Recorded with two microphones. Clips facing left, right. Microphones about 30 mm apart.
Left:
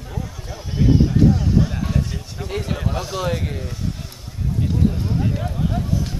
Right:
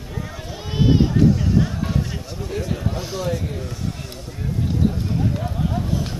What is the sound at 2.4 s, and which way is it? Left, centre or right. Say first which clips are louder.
Speech: left 1 dB; left.